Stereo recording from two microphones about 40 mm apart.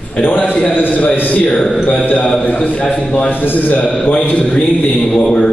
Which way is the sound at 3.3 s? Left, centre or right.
Left.